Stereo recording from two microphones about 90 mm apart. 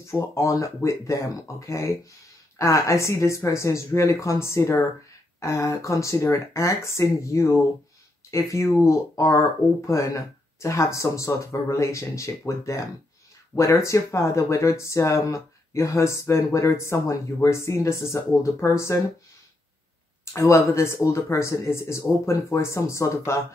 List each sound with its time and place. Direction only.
0.0 s speech: 30° left (ahead or behind)
20.3 s speech: 30° left (ahead or behind)